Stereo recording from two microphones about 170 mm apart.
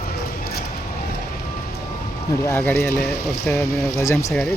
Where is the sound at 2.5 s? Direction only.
10° left (ahead or behind).